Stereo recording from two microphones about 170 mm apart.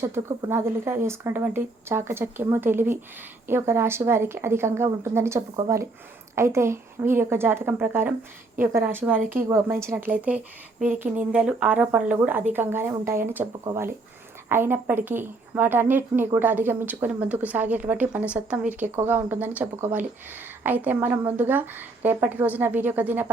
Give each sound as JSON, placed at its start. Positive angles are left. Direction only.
{"t": 0.0, "sound": "a woman's voice", "side_deg": -15}